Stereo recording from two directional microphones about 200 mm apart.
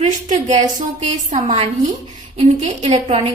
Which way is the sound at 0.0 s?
35° right (ahead or behind).